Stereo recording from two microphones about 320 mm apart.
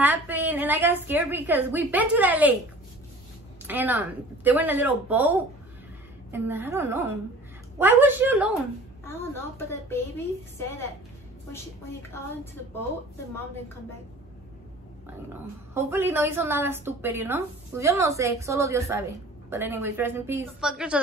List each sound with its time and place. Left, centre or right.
0.0 s a woman's voice: centre
3.6 s a woman's voice: centre
9.0 s a woman's voice: centre
15.7 s a woman's voice: centre